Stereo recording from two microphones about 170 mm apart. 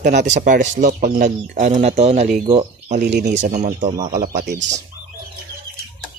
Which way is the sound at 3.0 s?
90° right.